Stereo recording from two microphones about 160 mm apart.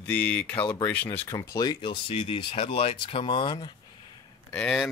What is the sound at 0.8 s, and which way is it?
Speech, 10° left (ahead or behind).